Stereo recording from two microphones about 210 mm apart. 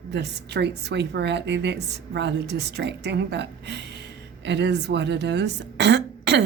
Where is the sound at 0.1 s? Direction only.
55° right (ahead or behind).